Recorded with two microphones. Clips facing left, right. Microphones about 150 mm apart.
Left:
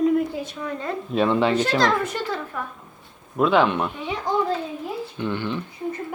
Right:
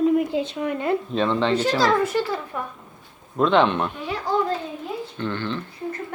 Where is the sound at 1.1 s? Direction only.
10° left (ahead or behind).